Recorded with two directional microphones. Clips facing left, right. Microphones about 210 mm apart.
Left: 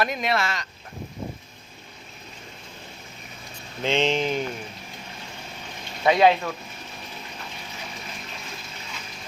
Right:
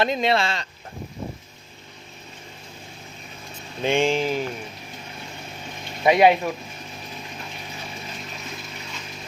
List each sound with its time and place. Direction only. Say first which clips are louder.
0.0 s speech: right 4 dB; 25° right (ahead or behind)
3.8 s mantra: right 2 dB; 15° right (ahead or behind)
6.0 s mantra: right 2 dB; 15° right (ahead or behind)